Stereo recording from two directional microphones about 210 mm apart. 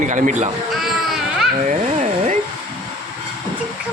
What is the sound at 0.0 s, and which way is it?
Speech, 35° right (ahead or behind).